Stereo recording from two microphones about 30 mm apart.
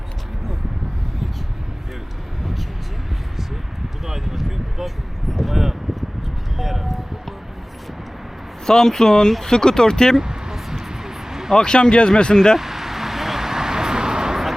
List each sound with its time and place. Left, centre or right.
2.4 s vehicle: centre
4.0 s a sound: centre
6.6 s vehicle: centre
8.6 s speech: centre
10.2 s a sound: centre
11.5 s speech: left
12.3 s speech: centre
12.5 s vehicle: centre